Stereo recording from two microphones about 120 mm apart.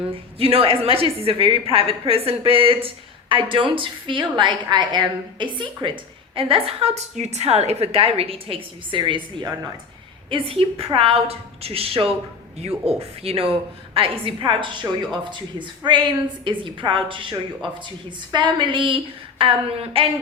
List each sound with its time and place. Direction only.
0.1 s a woman's voice: 50° right (ahead or behind)
6.3 s a woman's voice: 50° right (ahead or behind)